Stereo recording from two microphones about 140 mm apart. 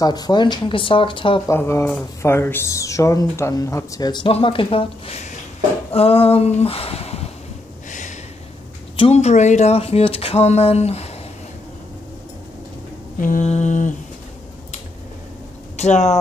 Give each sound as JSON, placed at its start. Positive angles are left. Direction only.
{"t": 0.0, "sound": "speech", "side_deg": 30}
{"t": 1.5, "sound": "speech", "side_deg": 20}
{"t": 8.9, "sound": "speech", "side_deg": 45}
{"t": 13.2, "sound": "mantra", "side_deg": 65}
{"t": 15.7, "sound": "speech", "side_deg": 55}